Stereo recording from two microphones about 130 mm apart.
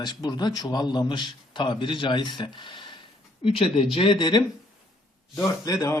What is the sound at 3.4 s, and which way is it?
A man's voice, 45° left (ahead or behind).